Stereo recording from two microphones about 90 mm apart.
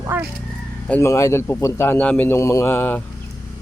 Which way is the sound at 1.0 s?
30° left (ahead or behind).